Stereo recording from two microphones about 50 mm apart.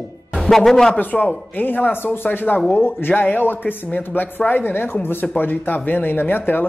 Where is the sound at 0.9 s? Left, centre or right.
Left.